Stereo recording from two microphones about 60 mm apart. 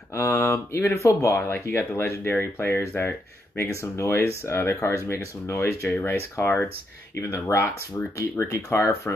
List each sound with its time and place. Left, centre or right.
0.1 s speech: left
1.5 s speech: left
7.2 s speech: left
7.4 s speech: left
8.2 s speech: left